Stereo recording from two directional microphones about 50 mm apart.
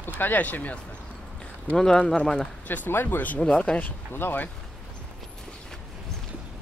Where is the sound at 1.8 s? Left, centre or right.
Centre.